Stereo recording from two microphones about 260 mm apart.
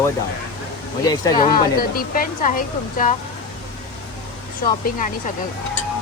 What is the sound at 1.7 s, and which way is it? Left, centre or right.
A woman's voice, left.